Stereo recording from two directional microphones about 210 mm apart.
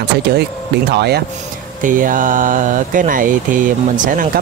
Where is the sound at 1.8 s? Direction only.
40° right (ahead or behind).